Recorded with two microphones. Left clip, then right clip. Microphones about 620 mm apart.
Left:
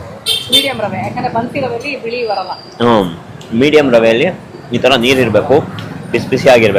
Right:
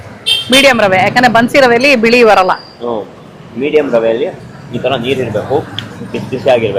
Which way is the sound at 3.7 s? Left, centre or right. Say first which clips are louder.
Left 1 dB; centre.